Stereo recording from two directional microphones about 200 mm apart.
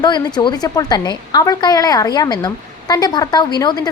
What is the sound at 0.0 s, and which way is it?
A woman's voice, 20° left (ahead or behind).